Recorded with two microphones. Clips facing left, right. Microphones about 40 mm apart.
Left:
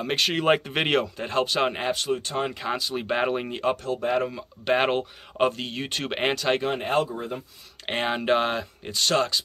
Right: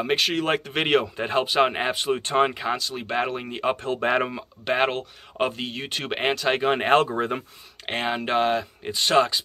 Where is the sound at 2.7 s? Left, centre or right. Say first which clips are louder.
Even; centre.